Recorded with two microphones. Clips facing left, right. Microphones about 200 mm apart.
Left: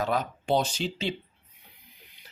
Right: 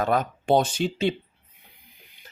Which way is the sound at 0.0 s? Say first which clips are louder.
Right 4 dB; 55° right (ahead or behind).